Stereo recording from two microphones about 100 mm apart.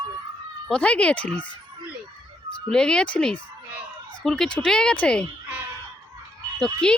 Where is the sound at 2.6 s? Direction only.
5° left (ahead or behind).